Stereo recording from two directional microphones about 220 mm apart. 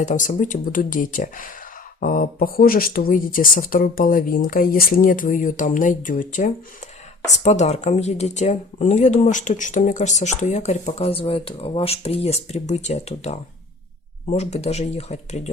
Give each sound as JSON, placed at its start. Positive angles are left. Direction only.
{"t": 0.0, "sound": "speech", "side_deg": 35}